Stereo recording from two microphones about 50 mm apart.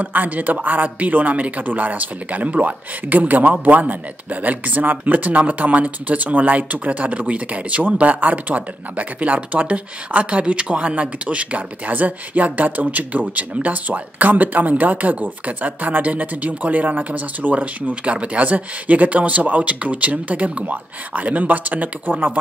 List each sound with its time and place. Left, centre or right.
0.0 s speech: right